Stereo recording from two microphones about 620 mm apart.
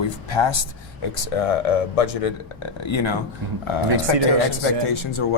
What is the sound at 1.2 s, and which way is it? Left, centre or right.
Speech, left.